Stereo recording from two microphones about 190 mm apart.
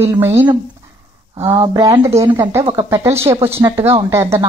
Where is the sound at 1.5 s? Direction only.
15° right (ahead or behind).